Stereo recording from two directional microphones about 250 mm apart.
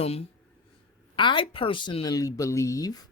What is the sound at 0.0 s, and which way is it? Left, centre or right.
A woman's voice, left.